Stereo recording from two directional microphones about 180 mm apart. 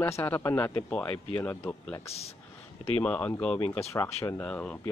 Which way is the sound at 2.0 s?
35° left (ahead or behind).